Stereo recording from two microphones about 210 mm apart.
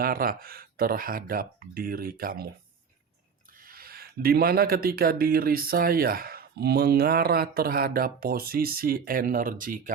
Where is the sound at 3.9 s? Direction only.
45° right (ahead or behind).